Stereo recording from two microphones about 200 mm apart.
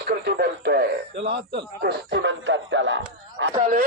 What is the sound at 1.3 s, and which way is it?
Speech, 60° right (ahead or behind).